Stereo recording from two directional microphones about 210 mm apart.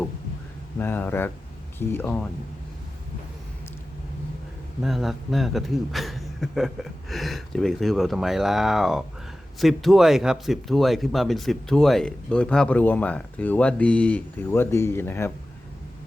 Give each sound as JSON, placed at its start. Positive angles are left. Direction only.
{"t": 0.8, "sound": "speech", "side_deg": 10}
{"t": 4.8, "sound": "speech", "side_deg": 0}